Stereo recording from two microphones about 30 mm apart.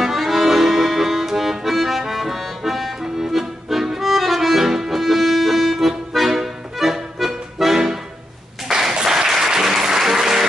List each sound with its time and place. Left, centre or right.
0.0 s accordion: centre
3.8 s music: centre
8.6 s a sound: centre
9.0 s applause: centre